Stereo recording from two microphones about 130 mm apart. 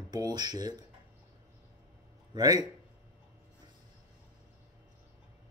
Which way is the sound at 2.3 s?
30° right (ahead or behind).